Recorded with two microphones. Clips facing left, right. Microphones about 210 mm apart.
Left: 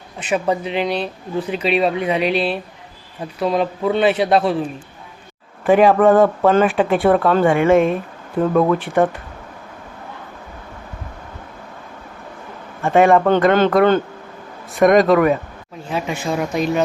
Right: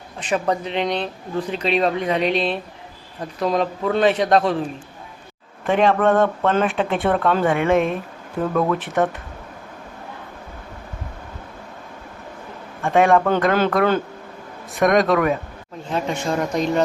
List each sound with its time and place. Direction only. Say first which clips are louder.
0.2 s speech: left 2 dB; 5° left (ahead or behind)
5.6 s speech: left 5 dB; 5° left (ahead or behind)
12.8 s speech: left 3 dB; centre (ahead or behind)